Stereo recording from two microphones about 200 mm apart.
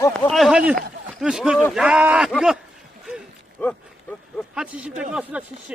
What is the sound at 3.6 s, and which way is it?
Speech, 10° left (ahead or behind).